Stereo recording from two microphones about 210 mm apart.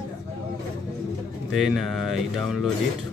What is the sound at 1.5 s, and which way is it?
Speech, centre (ahead or behind).